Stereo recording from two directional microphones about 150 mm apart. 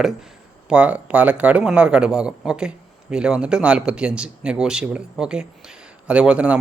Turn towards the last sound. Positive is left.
turn(degrees=-10)  # may be behind; listen again after turning